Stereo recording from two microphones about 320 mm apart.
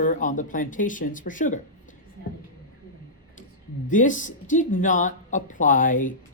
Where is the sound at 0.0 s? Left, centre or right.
Left.